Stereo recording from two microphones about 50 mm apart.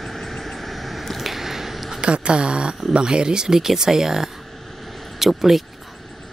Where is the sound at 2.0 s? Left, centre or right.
Centre.